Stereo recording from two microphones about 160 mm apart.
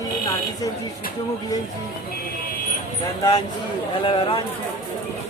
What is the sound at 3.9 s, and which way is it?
Speech, 35° left (ahead or behind).